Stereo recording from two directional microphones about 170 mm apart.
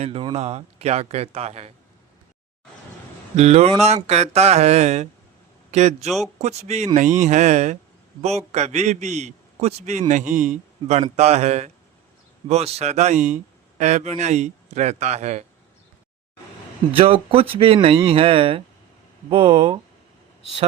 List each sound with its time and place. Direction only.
0.0 s speech: 35° right (ahead or behind)
3.3 s speech: 40° right (ahead or behind)
6.1 s speech: centre (ahead or behind)
6.4 s a man's voice: 40° right (ahead or behind)
16.9 s speech: 30° right (ahead or behind)